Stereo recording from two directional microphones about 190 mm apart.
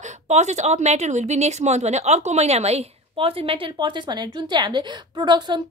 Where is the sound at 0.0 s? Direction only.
35° right (ahead or behind).